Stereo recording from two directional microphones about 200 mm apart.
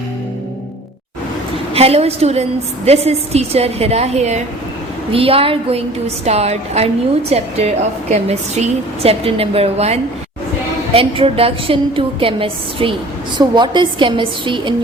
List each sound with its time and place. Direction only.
1.7 s a woman's voice: 30° right (ahead or behind)